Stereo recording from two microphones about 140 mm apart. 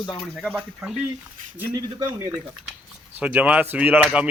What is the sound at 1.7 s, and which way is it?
Speech, 20° right (ahead or behind).